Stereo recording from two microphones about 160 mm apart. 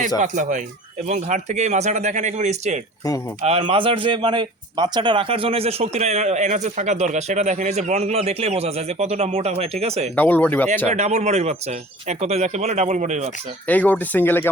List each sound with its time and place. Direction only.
0.2 s speech: 50° right (ahead or behind)
3.4 s a man's voice: 35° right (ahead or behind)
10.2 s speech: 10° left (ahead or behind)
10.8 s speech: 45° right (ahead or behind)
13.7 s speech: 10° left (ahead or behind)